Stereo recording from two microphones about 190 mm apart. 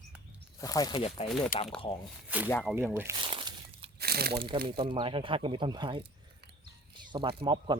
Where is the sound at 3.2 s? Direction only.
25° right (ahead or behind).